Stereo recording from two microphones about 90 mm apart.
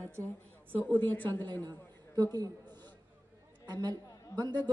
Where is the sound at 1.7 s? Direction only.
45° right (ahead or behind).